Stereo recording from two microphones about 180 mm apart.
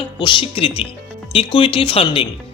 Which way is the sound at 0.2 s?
25° left (ahead or behind).